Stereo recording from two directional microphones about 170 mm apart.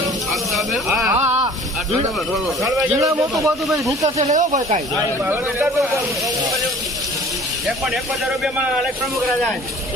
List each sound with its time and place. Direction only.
0.5 s speech: centre (ahead or behind)
1.2 s a sound: 40° right (ahead or behind)
3.0 s a man's voice: 20° right (ahead or behind)
4.2 s speech: 45° right (ahead or behind)
5.3 s a man's voice: 15° right (ahead or behind)
8.7 s a man's voice: centre (ahead or behind)